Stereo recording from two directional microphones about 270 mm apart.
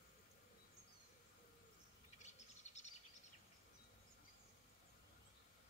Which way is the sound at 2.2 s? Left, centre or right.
Left.